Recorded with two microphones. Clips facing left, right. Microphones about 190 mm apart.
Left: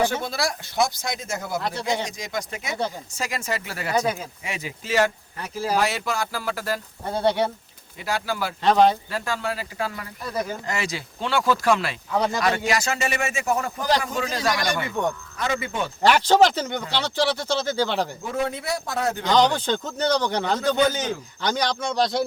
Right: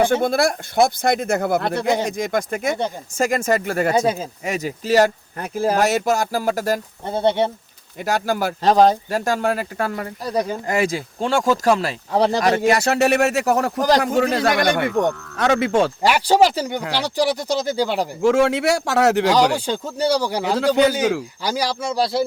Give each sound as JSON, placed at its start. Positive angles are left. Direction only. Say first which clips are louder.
{"t": 0.0, "sound": "speech", "louder": "right 7 dB", "side_deg": -55}
{"t": 3.9, "sound": "speech", "louder": "left 1 dB", "side_deg": -25}
{"t": 4.4, "sound": "speech", "louder": "right 10 dB", "side_deg": -40}
{"t": 5.4, "sound": "speech", "louder": "right 5 dB", "side_deg": -50}
{"t": 7.0, "sound": "speech", "louder": "right 2 dB", "side_deg": -20}
{"t": 7.9, "sound": "speech", "louder": "right 6 dB", "side_deg": -45}
{"t": 12.7, "sound": "speech", "louder": "right 8 dB", "side_deg": -65}
{"t": 15.4, "sound": "a man's voice", "louder": "right 12 dB", "side_deg": -80}
{"t": 16.0, "sound": "speech", "louder": "left 2 dB", "side_deg": -10}
{"t": 18.2, "sound": "a man's voice", "louder": "right 11 dB", "side_deg": -85}
{"t": 19.3, "sound": "speech", "louder": "right 2 dB", "side_deg": -10}
{"t": 21.0, "sound": "speech", "louder": "right 9 dB", "side_deg": -75}
{"t": 21.4, "sound": "speech", "louder": "even", "side_deg": -5}